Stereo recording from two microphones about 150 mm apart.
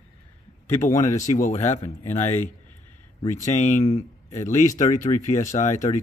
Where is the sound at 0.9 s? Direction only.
55° left (ahead or behind).